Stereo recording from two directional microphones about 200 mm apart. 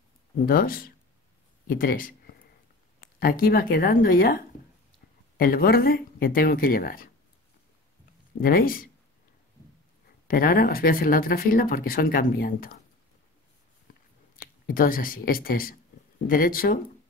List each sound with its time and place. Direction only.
0.5 s speech: 45° left (ahead or behind)
5.4 s speech: 45° left (ahead or behind)
8.4 s speech: 45° left (ahead or behind)
10.2 s speech: 45° left (ahead or behind)
14.3 s speech: 45° left (ahead or behind)